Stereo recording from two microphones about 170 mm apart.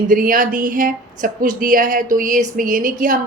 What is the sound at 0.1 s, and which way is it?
Speech, 55° right (ahead or behind).